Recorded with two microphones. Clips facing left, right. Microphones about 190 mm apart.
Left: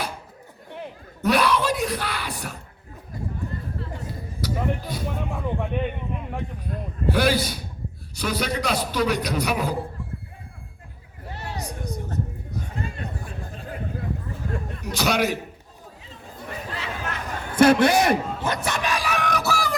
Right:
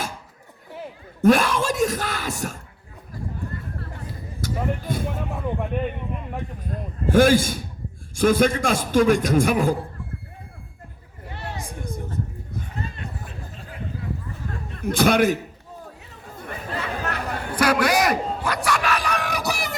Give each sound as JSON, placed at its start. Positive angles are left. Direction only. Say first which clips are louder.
{"t": 1.2, "sound": "a man's voice", "louder": "right 3 dB", "side_deg": -45}
{"t": 4.4, "sound": "speech", "louder": "even", "side_deg": -50}
{"t": 5.3, "sound": "a man's voice", "louder": "even", "side_deg": 0}
{"t": 7.1, "sound": "a man's voice", "louder": "right 5 dB", "side_deg": -45}
{"t": 14.8, "sound": "a man's voice", "louder": "right 5 dB", "side_deg": -50}
{"t": 16.0, "sound": "chatter", "louder": "even", "side_deg": -55}
{"t": 17.5, "sound": "a sound", "louder": "left 4 dB", "side_deg": 25}
{"t": 19.3, "sound": "a sound", "louder": "left 2 dB", "side_deg": -15}